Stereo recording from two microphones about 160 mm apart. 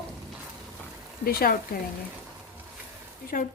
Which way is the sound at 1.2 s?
65° left (ahead or behind).